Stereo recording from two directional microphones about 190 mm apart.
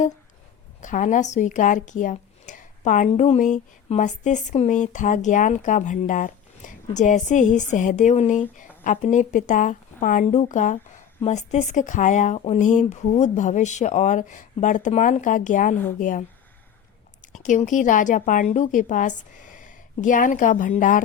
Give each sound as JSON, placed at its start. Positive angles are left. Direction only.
{"t": 0.8, "sound": "a woman's voice", "side_deg": 40}
{"t": 17.3, "sound": "a woman's voice", "side_deg": 40}